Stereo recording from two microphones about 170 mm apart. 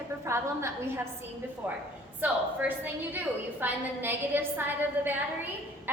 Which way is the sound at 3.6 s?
10° right (ahead or behind).